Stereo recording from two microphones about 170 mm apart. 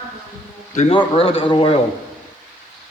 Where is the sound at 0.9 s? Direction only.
30° left (ahead or behind).